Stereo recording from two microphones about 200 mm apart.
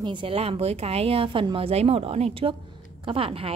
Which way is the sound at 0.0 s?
25° right (ahead or behind).